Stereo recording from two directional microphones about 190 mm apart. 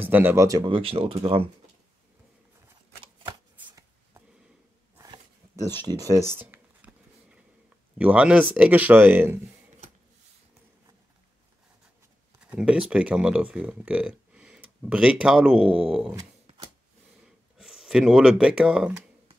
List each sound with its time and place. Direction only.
0.0 s speech: 10° right (ahead or behind); by 1.5 s 30° right (ahead or behind)
3.6 s a sound: 20° right (ahead or behind)
8.0 s speech: 5° right (ahead or behind)
12.4 s speech: 5° right (ahead or behind)
17.6 s speech: centre (ahead or behind)